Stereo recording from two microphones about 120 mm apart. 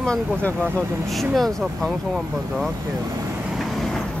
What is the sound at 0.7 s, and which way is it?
Speech, centre (ahead or behind).